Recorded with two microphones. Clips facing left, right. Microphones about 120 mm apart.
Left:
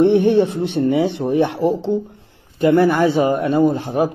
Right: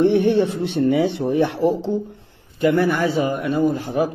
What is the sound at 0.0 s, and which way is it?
Speech, 20° left (ahead or behind).